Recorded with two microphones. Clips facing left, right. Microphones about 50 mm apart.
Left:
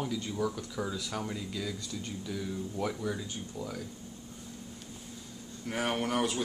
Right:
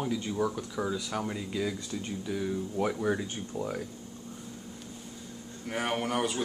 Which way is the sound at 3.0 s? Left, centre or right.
Right.